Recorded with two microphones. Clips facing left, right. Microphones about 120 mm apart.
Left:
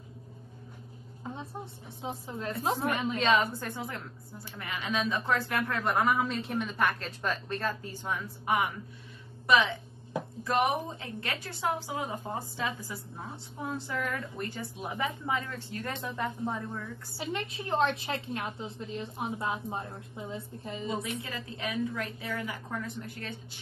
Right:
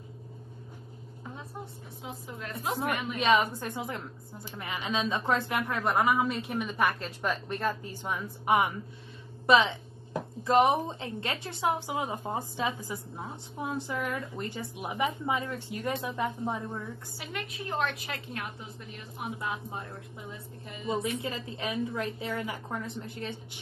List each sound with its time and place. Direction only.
1.3 s a sound: 25° left (ahead or behind)
2.0 s a woman's voice: 30° left (ahead or behind)
3.2 s a woman's voice: 15° right (ahead or behind)
17.2 s a woman's voice: 30° left (ahead or behind)
20.8 s a woman's voice: 25° right (ahead or behind)